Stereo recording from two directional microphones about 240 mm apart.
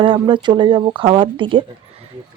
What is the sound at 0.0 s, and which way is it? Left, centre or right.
Speech, right.